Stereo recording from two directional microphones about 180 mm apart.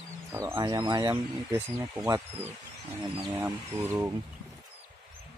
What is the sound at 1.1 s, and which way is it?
Speech, 10° right (ahead or behind).